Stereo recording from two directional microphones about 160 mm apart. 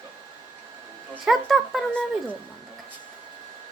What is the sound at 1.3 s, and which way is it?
Speech, centre (ahead or behind).